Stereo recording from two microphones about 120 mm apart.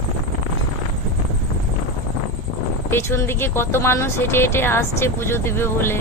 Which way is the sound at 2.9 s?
20° left (ahead or behind).